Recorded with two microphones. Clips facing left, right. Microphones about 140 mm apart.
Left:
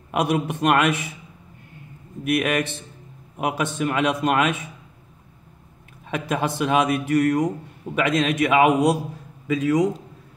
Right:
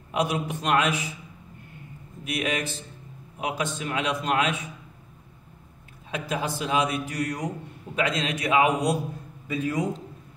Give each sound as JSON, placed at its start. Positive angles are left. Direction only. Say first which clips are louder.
{"t": 0.1, "sound": "a man's voice", "louder": "left 4 dB", "side_deg": 55}
{"t": 2.2, "sound": "a man's voice", "louder": "left 7 dB", "side_deg": 55}
{"t": 6.0, "sound": "a man's voice", "louder": "left 5 dB", "side_deg": 55}
{"t": 9.5, "sound": "a man's voice", "louder": "left 7 dB", "side_deg": 90}